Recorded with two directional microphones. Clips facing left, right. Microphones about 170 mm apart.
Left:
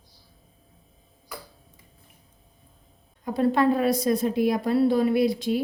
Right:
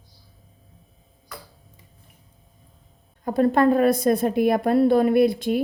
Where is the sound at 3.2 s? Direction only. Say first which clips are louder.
Right 3 dB; 50° right (ahead or behind).